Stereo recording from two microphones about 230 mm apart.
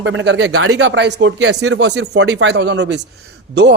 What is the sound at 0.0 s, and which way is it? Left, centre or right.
Speech, right.